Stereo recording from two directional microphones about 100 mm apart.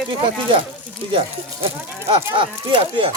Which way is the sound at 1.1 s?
65° right (ahead or behind).